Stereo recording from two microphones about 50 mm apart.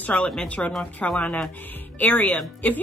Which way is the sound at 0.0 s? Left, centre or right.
Left.